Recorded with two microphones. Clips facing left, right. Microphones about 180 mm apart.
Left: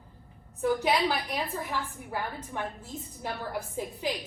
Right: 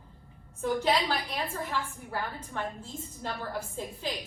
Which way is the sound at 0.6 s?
15° left (ahead or behind).